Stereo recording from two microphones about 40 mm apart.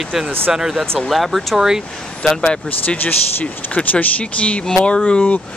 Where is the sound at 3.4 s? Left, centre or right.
Left.